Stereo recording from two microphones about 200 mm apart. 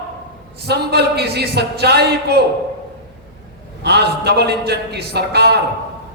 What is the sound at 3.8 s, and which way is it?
A man's voice, 55° right (ahead or behind).